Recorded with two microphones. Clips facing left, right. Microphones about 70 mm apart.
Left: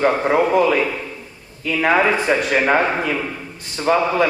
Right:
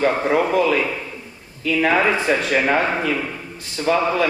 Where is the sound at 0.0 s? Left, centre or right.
Left.